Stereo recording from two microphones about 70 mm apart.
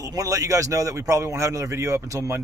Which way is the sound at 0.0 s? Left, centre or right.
Right.